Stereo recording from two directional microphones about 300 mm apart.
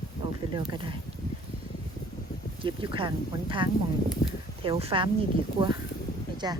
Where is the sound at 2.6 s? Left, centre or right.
Centre.